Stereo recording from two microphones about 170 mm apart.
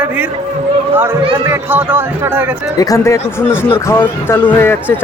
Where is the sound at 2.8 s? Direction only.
20° left (ahead or behind).